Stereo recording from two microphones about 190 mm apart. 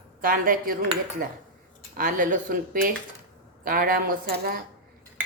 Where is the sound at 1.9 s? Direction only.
45° right (ahead or behind).